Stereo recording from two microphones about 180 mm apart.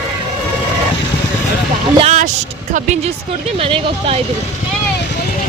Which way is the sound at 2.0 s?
40° right (ahead or behind).